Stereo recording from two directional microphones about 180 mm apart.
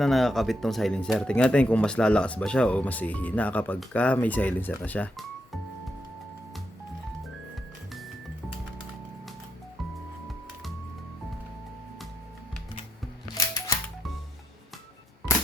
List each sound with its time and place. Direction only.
0.0 s speech: centre (ahead or behind)
13.3 s music: 20° left (ahead or behind)